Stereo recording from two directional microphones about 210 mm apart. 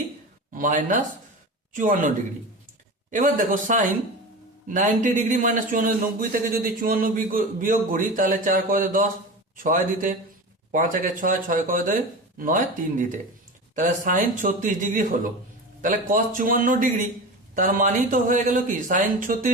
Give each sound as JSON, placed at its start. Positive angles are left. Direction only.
{"t": 0.5, "sound": "a man's voice", "side_deg": -40}